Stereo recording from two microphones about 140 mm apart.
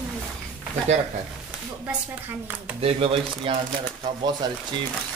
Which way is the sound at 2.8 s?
40° right (ahead or behind).